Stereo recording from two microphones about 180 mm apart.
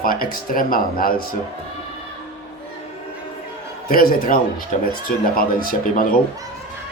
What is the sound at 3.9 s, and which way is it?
A man's voice, 55° left (ahead or behind).